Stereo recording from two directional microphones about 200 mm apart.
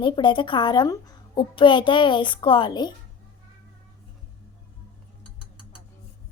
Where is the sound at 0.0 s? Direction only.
25° left (ahead or behind).